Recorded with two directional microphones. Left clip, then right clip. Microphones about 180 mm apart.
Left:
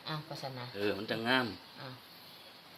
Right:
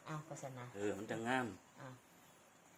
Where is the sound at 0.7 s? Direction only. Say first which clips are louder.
Left 7 dB; 5° left (ahead or behind).